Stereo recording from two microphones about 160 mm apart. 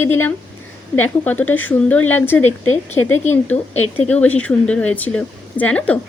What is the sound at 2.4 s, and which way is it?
Speech, 45° left (ahead or behind).